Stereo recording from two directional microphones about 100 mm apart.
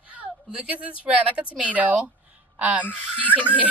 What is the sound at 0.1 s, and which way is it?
Speech, 10° right (ahead or behind).